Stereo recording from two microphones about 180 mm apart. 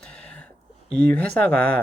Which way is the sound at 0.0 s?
5° left (ahead or behind).